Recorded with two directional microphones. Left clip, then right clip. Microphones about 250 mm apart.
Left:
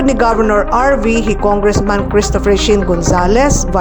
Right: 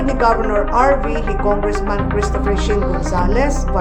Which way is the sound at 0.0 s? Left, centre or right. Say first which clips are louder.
Left 4 dB; left.